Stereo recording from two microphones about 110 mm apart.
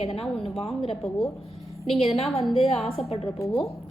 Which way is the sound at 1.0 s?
Centre (ahead or behind).